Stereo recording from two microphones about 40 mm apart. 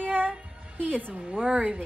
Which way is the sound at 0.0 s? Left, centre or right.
Right.